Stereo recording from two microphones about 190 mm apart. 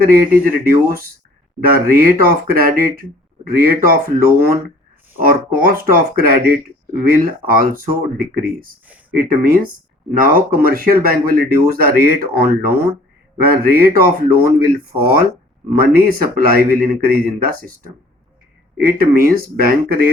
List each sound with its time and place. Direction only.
0.4 s speech: 50° right (ahead or behind)